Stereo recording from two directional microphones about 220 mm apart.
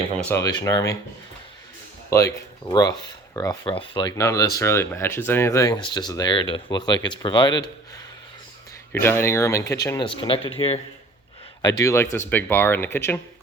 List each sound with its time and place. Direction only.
0.2 s speech: 10° left (ahead or behind)
2.0 s speech: 15° left (ahead or behind)
8.9 s speech: 10° left (ahead or behind)
11.6 s speech: 15° left (ahead or behind)